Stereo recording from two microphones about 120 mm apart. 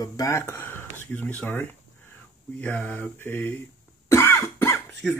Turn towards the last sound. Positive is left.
turn(degrees=20)  # may be behind; listen again after turning